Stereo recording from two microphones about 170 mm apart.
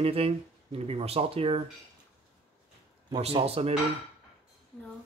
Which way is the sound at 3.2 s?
35° right (ahead or behind).